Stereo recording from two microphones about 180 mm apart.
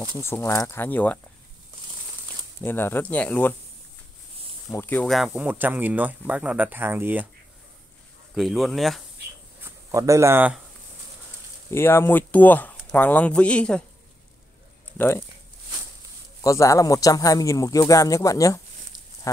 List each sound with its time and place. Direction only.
0.2 s speech: 15° left (ahead or behind)
2.6 s speech: 10° left (ahead or behind)
4.6 s speech: 10° left (ahead or behind); by 7.2 s 10° right (ahead or behind)
8.4 s speech: centre (ahead or behind)
9.6 s speech: 15° right (ahead or behind)
11.7 s speech: 15° left (ahead or behind)
15.0 s speech: 15° left (ahead or behind)
16.4 s speech: 15° left (ahead or behind)
19.3 s a sound: 20° left (ahead or behind)